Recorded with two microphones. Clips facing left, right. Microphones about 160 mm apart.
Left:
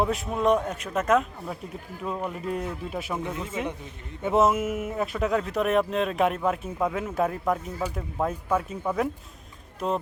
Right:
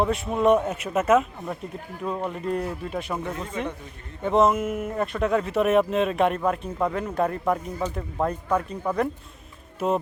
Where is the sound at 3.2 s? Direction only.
20° left (ahead or behind).